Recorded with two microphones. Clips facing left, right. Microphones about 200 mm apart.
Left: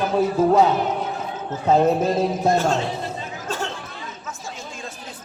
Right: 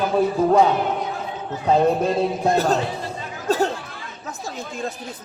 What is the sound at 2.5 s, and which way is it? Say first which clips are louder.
Speech: right 1 dB; 35° right (ahead or behind).